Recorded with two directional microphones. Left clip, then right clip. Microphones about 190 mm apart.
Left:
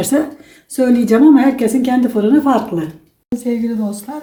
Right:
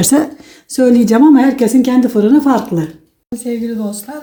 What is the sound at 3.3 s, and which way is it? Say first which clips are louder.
Speech: left 1 dB; 15° right (ahead or behind).